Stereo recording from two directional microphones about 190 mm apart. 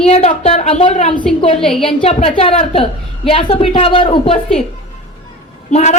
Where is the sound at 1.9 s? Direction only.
30° left (ahead or behind).